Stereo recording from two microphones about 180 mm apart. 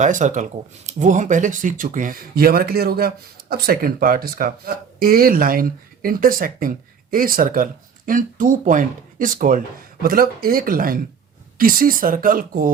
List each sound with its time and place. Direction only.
0.0 s speech: 45° right (ahead or behind)